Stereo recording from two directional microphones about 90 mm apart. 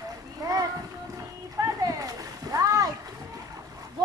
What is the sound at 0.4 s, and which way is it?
Children playing, 40° right (ahead or behind).